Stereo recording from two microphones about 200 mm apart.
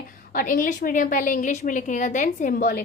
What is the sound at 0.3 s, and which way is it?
A woman's voice, 45° left (ahead or behind).